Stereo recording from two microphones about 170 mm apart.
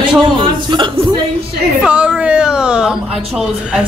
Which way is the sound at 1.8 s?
5° right (ahead or behind).